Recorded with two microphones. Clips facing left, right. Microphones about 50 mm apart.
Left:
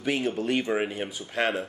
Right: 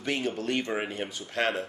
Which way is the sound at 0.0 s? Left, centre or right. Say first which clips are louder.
Left 3 dB; centre.